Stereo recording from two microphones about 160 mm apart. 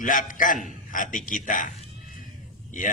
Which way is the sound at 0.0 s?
55° left (ahead or behind).